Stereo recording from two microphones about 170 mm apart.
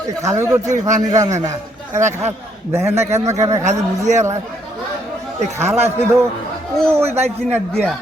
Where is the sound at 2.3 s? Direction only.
15° right (ahead or behind).